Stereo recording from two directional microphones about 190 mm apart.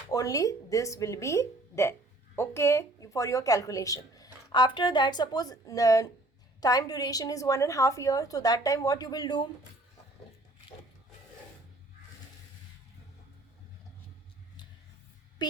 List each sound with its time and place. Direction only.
0.1 s a woman's voice: 20° left (ahead or behind)
15.4 s speech: 25° left (ahead or behind)